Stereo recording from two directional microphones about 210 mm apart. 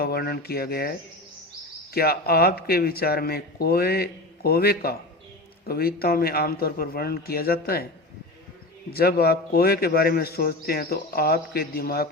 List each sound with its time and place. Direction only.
0.0 s a man's voice: 45° left (ahead or behind)
8.9 s a man's voice: 45° left (ahead or behind)